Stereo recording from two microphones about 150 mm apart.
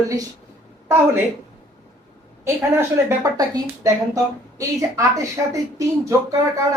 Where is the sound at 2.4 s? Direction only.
15° right (ahead or behind).